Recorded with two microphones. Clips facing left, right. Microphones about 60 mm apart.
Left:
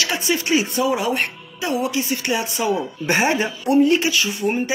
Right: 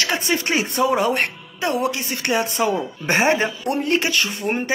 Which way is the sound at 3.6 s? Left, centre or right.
Right.